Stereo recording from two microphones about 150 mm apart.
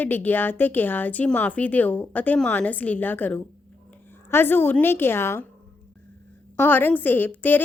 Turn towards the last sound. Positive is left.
turn(degrees=10)  # may be behind; listen again after turning